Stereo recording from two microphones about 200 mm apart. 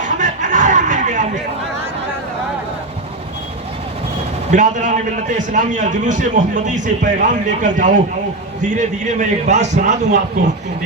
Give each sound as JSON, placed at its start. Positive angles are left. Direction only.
{"t": 0.0, "sound": "snicker", "side_deg": -40}
{"t": 4.5, "sound": "a man's voice", "side_deg": -40}